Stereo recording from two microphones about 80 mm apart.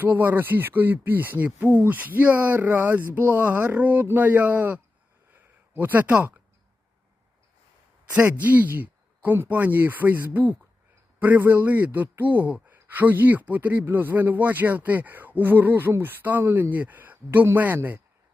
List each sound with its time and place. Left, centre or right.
0.0 s speech: right
5.3 s a sound: right
8.1 s speech: centre